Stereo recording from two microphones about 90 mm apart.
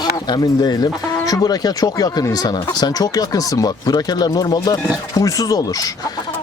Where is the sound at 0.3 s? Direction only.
45° left (ahead or behind).